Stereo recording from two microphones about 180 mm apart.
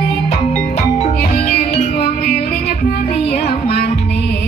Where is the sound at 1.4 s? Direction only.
50° left (ahead or behind).